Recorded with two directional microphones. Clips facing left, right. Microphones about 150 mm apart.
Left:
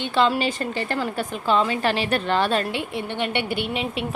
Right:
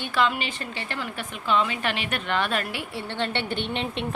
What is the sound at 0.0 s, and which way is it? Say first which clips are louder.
A woman's voice: left 5 dB; 30° left (ahead or behind).